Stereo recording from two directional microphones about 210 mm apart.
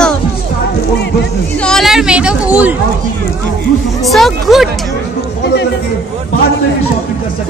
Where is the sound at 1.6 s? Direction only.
Centre (ahead or behind).